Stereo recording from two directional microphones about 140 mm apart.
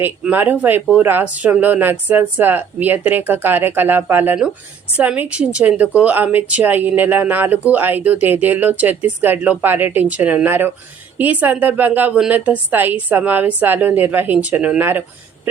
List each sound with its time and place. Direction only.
0.0 s a woman's voice: 10° right (ahead or behind)